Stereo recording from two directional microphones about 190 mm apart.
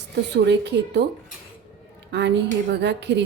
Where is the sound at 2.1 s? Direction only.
65° right (ahead or behind).